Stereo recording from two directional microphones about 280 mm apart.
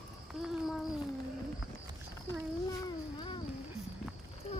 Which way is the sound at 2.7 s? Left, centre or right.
Centre.